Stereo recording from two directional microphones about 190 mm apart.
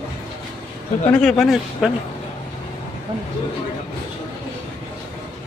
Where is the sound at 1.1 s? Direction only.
5° left (ahead or behind).